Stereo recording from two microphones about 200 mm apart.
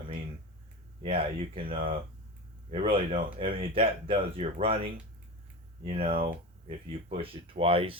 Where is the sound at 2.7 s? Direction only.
30° right (ahead or behind).